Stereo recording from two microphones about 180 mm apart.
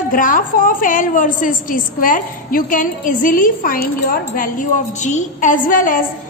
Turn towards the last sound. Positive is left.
turn(degrees=50)  # may be behind; listen again after turning